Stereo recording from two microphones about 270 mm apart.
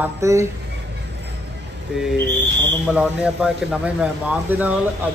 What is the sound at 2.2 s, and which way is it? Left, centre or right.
Speech, right.